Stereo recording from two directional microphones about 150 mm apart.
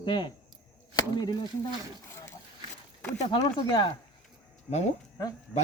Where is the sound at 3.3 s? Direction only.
30° left (ahead or behind).